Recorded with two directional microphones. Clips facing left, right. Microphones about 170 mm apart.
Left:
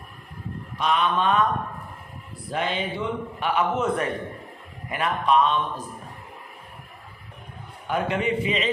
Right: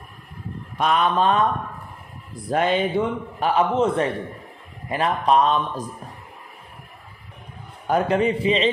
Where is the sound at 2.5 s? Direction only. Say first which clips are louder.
Right 7 dB; 45° right (ahead or behind).